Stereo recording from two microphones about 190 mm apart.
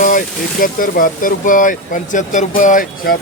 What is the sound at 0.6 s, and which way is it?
Speech, 45° left (ahead or behind).